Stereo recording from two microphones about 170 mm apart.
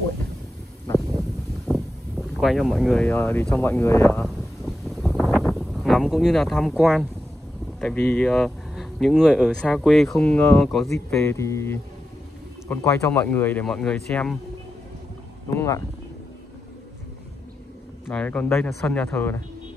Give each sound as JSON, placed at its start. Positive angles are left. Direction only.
{"t": 1.7, "sound": "a sound", "side_deg": 0}
{"t": 3.1, "sound": "speech", "side_deg": 10}
{"t": 4.2, "sound": "a sound", "side_deg": 0}
{"t": 7.8, "sound": "speech", "side_deg": 10}
{"t": 11.1, "sound": "speech", "side_deg": 15}
{"t": 15.5, "sound": "speech", "side_deg": 15}
{"t": 18.0, "sound": "speech", "side_deg": 10}